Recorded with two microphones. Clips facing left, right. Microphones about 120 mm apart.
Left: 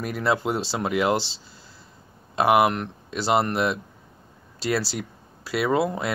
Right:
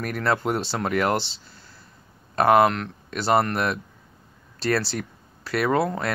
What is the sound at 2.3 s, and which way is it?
Speech, 15° left (ahead or behind).